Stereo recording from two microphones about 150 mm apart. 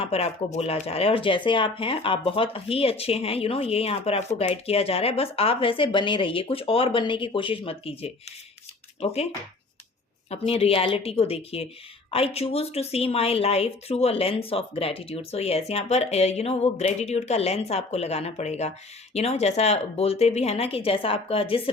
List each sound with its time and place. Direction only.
0.0 s a woman's voice: 45° left (ahead or behind)